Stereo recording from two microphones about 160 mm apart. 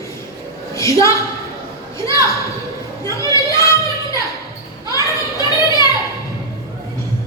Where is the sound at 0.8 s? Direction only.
20° left (ahead or behind).